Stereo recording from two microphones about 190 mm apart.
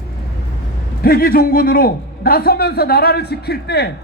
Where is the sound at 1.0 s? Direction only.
50° left (ahead or behind).